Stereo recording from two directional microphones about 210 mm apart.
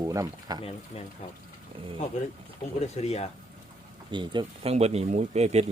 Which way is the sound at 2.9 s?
30° left (ahead or behind).